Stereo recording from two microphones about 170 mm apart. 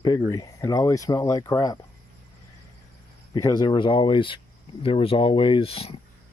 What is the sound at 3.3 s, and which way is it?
Speech, 20° left (ahead or behind).